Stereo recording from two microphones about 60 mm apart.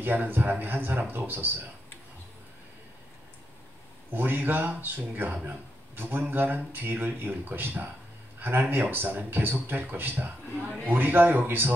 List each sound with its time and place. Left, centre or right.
0.0 s speech: right
4.1 s a man's voice: right